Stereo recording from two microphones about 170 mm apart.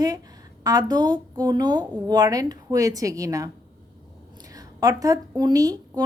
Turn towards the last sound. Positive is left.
turn(degrees=-20)  # may be behind; listen again after turning